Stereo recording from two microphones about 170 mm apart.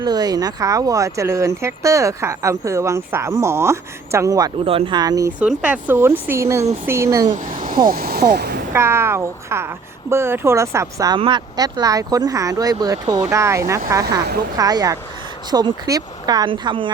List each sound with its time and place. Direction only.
0.0 s speech: 25° right (ahead or behind)
5.4 s speech: 10° right (ahead or behind)
7.3 s speech: 50° right (ahead or behind)
7.9 s speech: 60° right (ahead or behind)
8.7 s speech: 15° right (ahead or behind)
14.2 s speech: 70° right (ahead or behind)
14.5 s speech: 20° right (ahead or behind)